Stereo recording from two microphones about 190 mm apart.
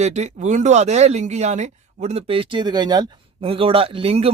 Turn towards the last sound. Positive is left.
turn(degrees=-30)  # may be behind; listen again after turning